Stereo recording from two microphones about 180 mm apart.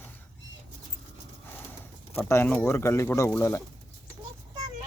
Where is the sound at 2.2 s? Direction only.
15° left (ahead or behind).